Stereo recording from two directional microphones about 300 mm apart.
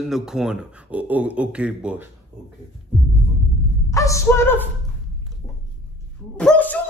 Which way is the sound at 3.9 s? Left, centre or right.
Centre.